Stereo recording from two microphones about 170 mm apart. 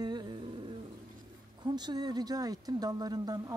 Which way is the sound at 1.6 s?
25° right (ahead or behind).